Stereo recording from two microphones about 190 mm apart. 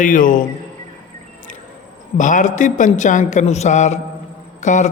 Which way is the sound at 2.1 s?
40° left (ahead or behind).